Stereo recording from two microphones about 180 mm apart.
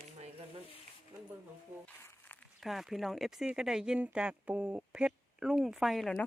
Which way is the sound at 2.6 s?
Centre (ahead or behind).